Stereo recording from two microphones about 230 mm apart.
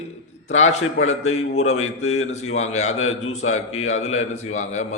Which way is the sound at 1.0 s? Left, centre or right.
Left.